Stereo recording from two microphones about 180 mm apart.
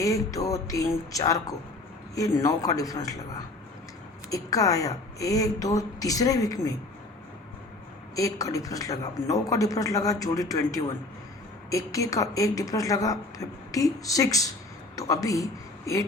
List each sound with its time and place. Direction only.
0.0 s a woman's voice: 20° left (ahead or behind)
4.3 s a woman's voice: 20° left (ahead or behind)
8.1 s a woman's voice: 20° left (ahead or behind)